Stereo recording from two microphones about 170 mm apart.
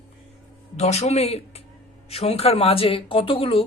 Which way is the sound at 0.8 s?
40° left (ahead or behind).